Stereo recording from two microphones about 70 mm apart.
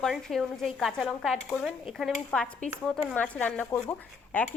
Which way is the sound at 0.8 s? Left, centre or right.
Centre.